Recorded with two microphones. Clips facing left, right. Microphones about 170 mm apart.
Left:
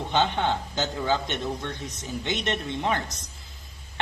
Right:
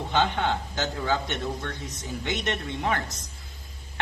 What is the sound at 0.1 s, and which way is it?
A man's voice, 20° left (ahead or behind).